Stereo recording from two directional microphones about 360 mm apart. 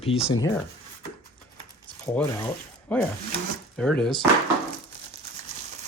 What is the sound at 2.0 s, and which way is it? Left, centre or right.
Speech, centre.